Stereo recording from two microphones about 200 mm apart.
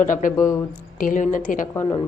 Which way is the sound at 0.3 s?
15° left (ahead or behind).